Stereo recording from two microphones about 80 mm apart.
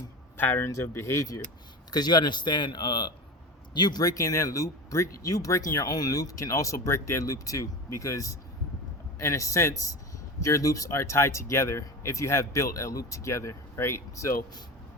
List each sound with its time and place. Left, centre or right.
0.3 s speech: left
0.7 s speech: left
1.9 s a man's voice: left